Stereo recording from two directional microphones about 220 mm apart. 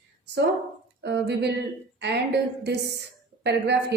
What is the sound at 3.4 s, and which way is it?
Speech, 50° right (ahead or behind).